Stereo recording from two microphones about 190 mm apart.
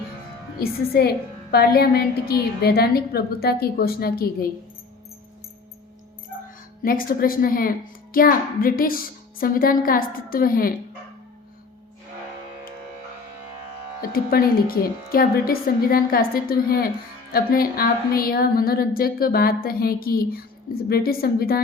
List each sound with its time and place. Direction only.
0.6 s a woman's voice: 55° left (ahead or behind)
6.8 s a woman's voice: 50° left (ahead or behind)
14.0 s a woman's voice: 50° left (ahead or behind)